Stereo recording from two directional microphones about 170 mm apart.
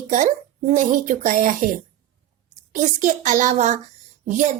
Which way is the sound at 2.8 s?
45° right (ahead or behind).